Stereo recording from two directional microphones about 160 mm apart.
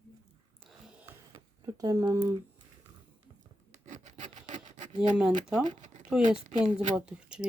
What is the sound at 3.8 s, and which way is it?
Filing, 50° right (ahead or behind).